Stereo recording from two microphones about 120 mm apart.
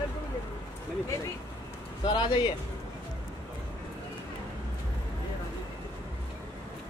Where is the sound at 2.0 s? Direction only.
40° left (ahead or behind).